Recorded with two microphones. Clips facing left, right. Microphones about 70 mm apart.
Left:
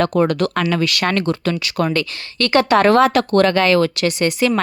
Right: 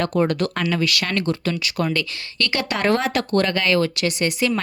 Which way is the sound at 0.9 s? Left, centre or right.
Left.